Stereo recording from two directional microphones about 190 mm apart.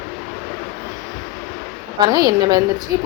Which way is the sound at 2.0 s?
20° right (ahead or behind).